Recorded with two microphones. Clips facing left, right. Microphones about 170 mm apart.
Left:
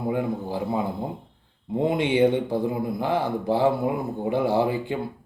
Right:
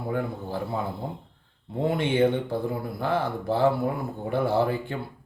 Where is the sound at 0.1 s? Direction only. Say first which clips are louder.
Left 2 dB; 15° left (ahead or behind).